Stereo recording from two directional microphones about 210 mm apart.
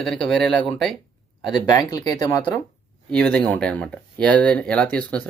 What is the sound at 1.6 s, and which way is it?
Speech, 20° left (ahead or behind).